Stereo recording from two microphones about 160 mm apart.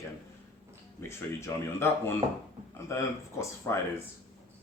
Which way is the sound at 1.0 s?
15° left (ahead or behind).